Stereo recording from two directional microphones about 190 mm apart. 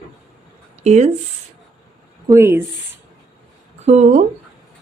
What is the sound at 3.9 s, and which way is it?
Speech, 35° right (ahead or behind).